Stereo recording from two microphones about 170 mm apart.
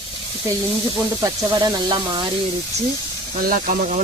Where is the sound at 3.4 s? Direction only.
55° right (ahead or behind).